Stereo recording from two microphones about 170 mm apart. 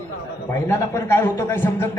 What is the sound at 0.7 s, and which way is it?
A man's voice, 15° left (ahead or behind).